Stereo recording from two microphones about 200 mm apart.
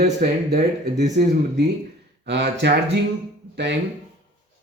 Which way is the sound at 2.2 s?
60° right (ahead or behind).